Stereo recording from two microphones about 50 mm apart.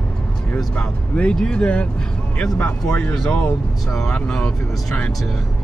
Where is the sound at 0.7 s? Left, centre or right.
Left.